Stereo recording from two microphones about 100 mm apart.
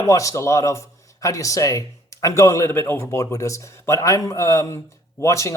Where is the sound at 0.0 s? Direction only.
30° left (ahead or behind).